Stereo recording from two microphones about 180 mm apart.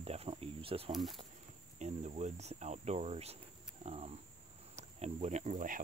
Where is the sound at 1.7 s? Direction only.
40° right (ahead or behind).